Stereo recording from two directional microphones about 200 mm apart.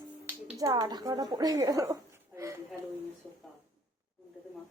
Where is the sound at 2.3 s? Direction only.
15° right (ahead or behind).